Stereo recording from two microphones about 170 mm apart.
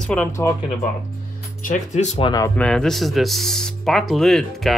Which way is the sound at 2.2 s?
20° left (ahead or behind).